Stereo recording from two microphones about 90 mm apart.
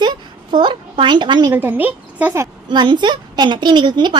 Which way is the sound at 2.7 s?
60° right (ahead or behind).